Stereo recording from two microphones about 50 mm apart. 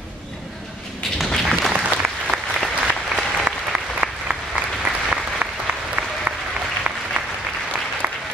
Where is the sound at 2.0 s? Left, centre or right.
Right.